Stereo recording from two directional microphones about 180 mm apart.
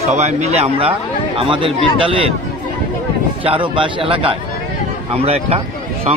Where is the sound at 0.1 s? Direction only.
40° right (ahead or behind).